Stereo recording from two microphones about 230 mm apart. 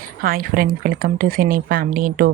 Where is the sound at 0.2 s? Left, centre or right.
Right.